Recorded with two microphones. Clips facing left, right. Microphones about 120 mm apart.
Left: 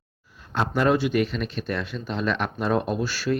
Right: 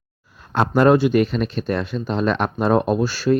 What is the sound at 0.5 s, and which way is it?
Speech, 50° right (ahead or behind).